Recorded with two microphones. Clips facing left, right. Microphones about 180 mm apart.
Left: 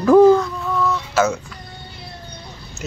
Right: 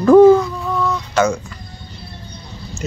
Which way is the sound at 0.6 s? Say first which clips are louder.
Right 1 dB; centre (ahead or behind).